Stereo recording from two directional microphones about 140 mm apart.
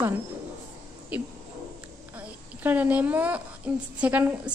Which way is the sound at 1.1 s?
10° right (ahead or behind).